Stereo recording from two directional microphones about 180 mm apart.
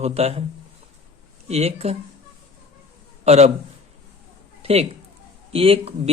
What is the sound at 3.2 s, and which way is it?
Speech, 35° right (ahead or behind).